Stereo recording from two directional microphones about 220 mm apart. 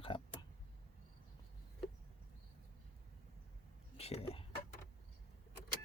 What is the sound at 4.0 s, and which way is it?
Speech, 30° left (ahead or behind).